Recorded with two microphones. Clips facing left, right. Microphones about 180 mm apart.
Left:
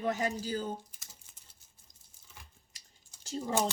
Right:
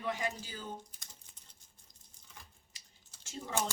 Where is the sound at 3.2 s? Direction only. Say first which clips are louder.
Left 8 dB; 35° left (ahead or behind).